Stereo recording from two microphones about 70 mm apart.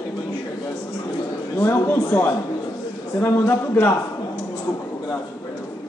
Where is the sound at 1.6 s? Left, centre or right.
Left.